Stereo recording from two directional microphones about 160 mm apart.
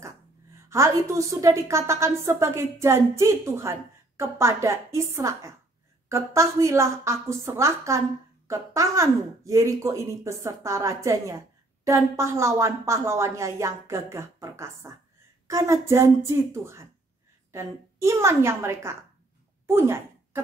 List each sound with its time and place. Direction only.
0.7 s a woman's voice: 20° right (ahead or behind)